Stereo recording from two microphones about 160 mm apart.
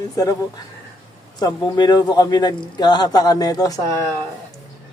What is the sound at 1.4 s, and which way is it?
A man's voice, 25° left (ahead or behind).